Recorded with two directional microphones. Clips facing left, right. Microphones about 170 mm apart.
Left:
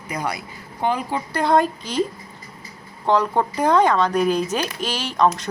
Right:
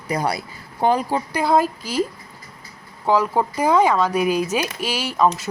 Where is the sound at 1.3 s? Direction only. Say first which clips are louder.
Left 1 dB; 5° right (ahead or behind).